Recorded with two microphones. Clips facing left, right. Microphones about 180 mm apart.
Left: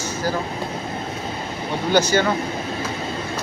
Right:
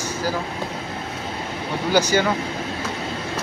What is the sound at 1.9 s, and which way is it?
Speech, 10° right (ahead or behind).